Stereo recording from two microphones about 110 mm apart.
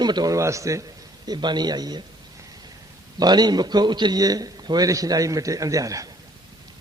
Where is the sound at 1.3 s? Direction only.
40° right (ahead or behind).